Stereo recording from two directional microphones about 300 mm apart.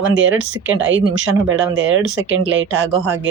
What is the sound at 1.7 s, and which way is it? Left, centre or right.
Speech, right.